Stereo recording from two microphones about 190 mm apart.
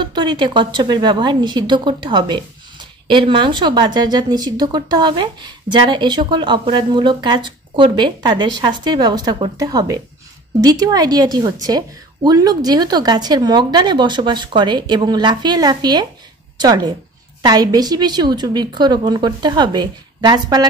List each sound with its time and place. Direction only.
0.0 s a woman's voice: 25° right (ahead or behind)